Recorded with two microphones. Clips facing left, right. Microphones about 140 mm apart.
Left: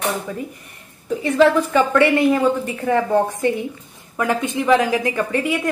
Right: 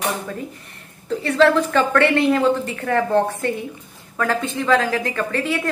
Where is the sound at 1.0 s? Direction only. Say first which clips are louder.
Left 1 dB; 10° left (ahead or behind).